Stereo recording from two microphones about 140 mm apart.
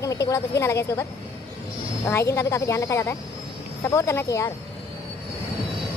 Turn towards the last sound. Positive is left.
turn(degrees=20)  # may be behind; listen again after turning